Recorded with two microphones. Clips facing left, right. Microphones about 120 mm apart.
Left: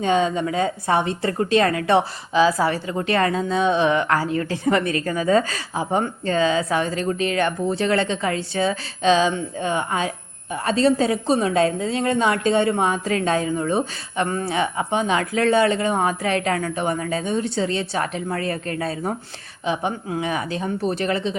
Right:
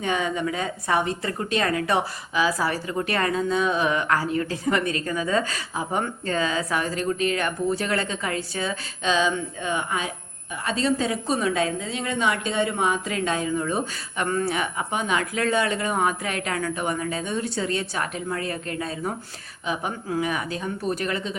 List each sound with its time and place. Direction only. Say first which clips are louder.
0.0 s a woman's voice: left 5 dB; 25° left (ahead or behind)